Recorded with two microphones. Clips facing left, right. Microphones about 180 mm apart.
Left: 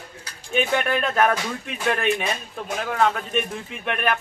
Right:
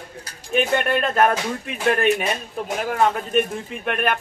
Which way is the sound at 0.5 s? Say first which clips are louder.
Right 2 dB; centre (ahead or behind).